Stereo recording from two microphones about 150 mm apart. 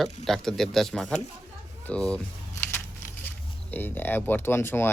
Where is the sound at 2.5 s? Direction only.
15° left (ahead or behind).